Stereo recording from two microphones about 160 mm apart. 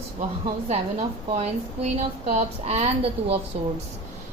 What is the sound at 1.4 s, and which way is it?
A woman's voice, 45° right (ahead or behind).